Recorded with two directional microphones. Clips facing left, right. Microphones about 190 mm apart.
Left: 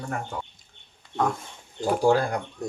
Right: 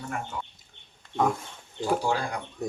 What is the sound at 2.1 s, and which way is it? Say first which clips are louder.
Speech: left 7 dB; 50° left (ahead or behind).